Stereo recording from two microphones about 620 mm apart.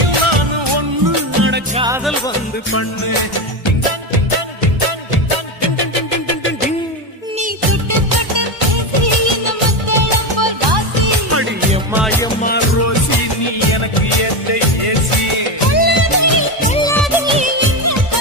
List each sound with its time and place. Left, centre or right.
0.0 s music: right
1.4 s music: centre
3.6 s music of bollywood: left
7.9 s music: right
11.0 s music: right
11.7 s music: centre
12.4 s music: centre
13.2 s music: left
16.6 s music of bollywood: centre
17.4 s music: centre